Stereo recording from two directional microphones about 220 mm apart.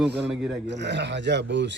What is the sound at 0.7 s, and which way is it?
Speech, 50° right (ahead or behind).